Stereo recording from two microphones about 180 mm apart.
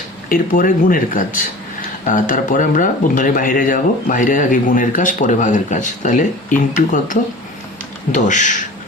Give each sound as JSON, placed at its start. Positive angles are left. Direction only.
{"t": 0.3, "sound": "speech", "side_deg": 50}